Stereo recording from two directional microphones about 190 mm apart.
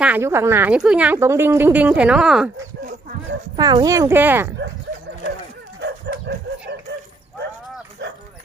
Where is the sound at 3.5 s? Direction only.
20° right (ahead or behind).